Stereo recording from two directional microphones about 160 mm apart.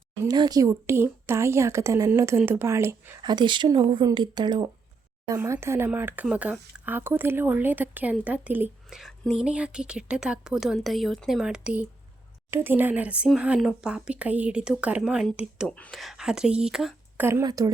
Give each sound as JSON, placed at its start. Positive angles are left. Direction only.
{"t": 0.3, "sound": "speech", "side_deg": -25}
{"t": 3.2, "sound": "speech", "side_deg": -30}
{"t": 5.3, "sound": "a woman's voice", "side_deg": -15}
{"t": 17.4, "sound": "speech", "side_deg": -20}